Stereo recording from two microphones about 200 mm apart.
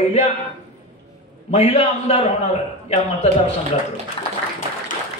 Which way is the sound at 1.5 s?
30° left (ahead or behind).